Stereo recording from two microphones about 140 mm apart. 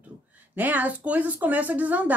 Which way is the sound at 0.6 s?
10° right (ahead or behind).